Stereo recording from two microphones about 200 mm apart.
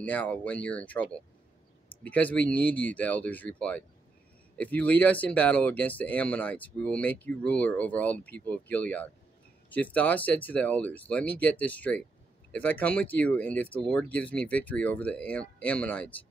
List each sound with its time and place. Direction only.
0.0 s speech: 5° left (ahead or behind)
2.0 s speech: 10° left (ahead or behind)